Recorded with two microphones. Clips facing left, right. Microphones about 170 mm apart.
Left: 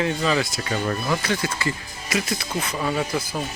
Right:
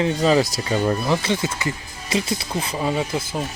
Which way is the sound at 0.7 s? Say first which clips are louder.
Right 4 dB; 25° right (ahead or behind).